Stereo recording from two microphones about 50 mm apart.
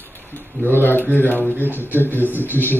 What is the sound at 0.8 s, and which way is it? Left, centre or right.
Speech, left.